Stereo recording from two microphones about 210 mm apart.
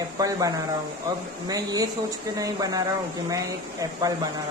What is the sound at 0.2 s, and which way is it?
Speech, 15° right (ahead or behind).